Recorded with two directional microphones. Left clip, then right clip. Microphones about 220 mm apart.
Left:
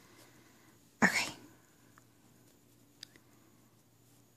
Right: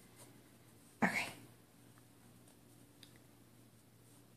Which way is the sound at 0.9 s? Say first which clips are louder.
Left 7 dB; 45° left (ahead or behind).